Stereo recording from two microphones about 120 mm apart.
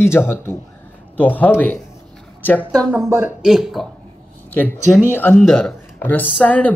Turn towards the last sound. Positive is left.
turn(degrees=10)  # may be behind; listen again after turning